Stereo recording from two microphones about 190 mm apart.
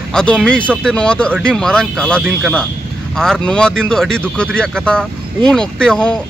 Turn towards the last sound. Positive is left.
turn(degrees=5)  # may be behind; listen again after turning